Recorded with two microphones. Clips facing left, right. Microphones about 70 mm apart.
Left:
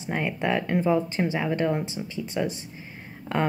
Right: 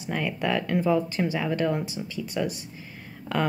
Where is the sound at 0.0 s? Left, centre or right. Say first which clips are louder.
Left 1 dB; left.